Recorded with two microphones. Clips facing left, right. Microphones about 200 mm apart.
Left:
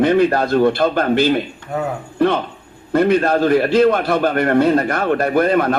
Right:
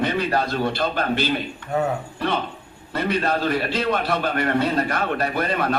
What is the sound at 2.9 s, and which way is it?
A man's voice, 50° left (ahead or behind).